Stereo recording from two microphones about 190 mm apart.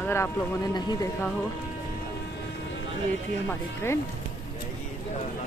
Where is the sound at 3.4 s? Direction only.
15° left (ahead or behind).